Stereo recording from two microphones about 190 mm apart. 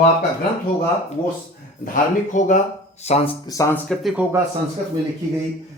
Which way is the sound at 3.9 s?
Centre (ahead or behind).